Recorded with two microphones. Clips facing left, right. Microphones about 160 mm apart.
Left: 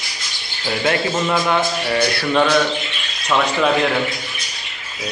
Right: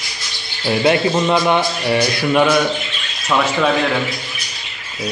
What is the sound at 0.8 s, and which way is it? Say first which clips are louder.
A man's voice: right 4 dB; 20° right (ahead or behind).